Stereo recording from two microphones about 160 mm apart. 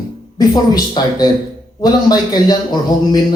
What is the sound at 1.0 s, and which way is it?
Speech, 25° left (ahead or behind).